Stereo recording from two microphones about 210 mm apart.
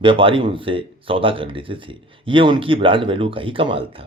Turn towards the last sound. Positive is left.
turn(degrees=-25)  # may be behind; listen again after turning